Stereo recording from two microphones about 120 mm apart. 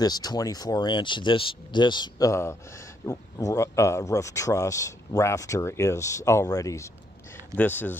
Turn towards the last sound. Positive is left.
turn(degrees=15)  # may be behind; listen again after turning